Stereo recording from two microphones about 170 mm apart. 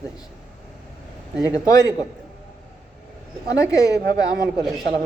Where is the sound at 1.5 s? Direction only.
20° left (ahead or behind).